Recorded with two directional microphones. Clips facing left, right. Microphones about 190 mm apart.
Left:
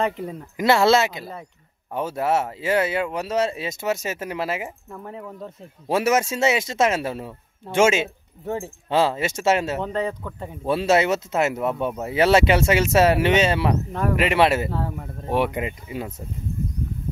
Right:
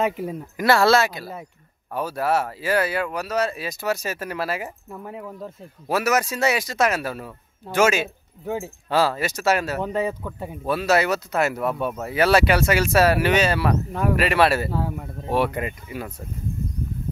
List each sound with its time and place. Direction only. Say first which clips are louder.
0.6 s speech: even; 20° left (ahead or behind)
4.9 s speech: right 1 dB; 5° right (ahead or behind)
5.9 s speech: left 2 dB; 25° left (ahead or behind)
8.5 s speech: even; centre (ahead or behind)
8.8 s speech: left 1 dB; 20° left (ahead or behind)
9.8 s a man's voice: right 1 dB; 10° right (ahead or behind)
10.6 s speech: left 1 dB; 25° left (ahead or behind)
14.7 s speech: right 1 dB; 5° right (ahead or behind)
15.3 s speech: even; 15° left (ahead or behind)